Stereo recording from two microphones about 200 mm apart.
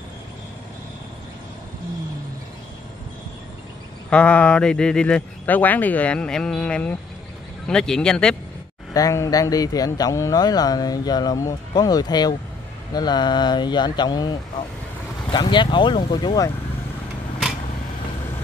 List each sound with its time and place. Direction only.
4.1 s speech: 5° left (ahead or behind)
8.9 s speech: 15° left (ahead or behind)
15.3 s speech: 25° left (ahead or behind)